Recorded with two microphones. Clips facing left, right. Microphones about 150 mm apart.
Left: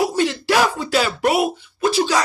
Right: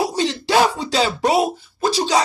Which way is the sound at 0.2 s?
25° right (ahead or behind).